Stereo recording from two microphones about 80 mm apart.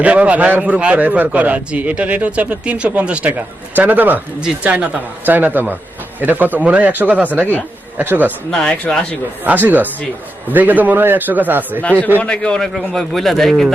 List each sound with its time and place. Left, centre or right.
0.0 s a man's voice: centre
8.4 s speech: centre
9.4 s a man's voice: right
11.8 s speech: centre